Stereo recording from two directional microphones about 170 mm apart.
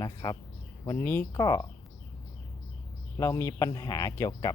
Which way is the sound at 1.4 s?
25° left (ahead or behind).